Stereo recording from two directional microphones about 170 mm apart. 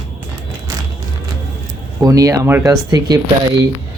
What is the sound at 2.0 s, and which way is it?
Speech, 20° right (ahead or behind).